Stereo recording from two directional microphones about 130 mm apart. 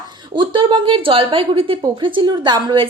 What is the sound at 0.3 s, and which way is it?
A woman's voice, 40° right (ahead or behind).